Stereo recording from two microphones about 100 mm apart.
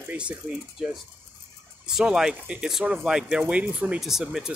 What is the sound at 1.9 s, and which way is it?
Speech, 5° right (ahead or behind).